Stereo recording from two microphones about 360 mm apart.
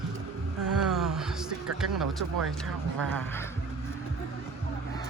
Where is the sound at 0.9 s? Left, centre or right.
Centre.